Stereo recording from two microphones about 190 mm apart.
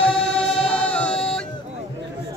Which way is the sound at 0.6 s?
5° left (ahead or behind).